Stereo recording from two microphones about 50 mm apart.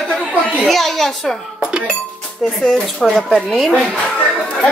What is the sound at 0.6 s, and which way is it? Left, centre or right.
Speech, centre.